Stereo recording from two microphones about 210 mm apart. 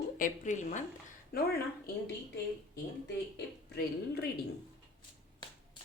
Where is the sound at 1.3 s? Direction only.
45° left (ahead or behind).